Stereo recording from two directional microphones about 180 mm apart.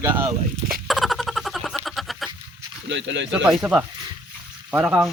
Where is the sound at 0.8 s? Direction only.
Centre (ahead or behind).